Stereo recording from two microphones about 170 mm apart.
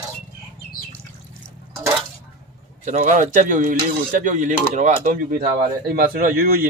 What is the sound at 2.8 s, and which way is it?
Speech, 45° right (ahead or behind).